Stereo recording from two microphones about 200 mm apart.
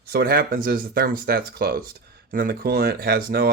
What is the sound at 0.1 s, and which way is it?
Speech, 50° right (ahead or behind).